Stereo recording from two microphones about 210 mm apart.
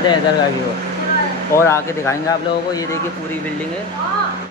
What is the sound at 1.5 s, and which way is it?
Speech, 15° left (ahead or behind).